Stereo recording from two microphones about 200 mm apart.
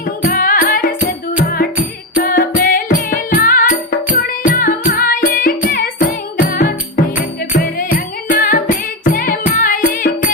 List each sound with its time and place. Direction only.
0.3 s music: 45° left (ahead or behind)
2.2 s music: 45° left (ahead or behind)